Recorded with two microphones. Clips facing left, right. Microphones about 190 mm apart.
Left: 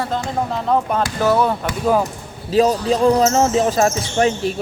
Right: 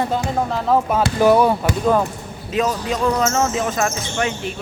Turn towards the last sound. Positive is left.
turn(degrees=35)  # may be behind; listen again after turning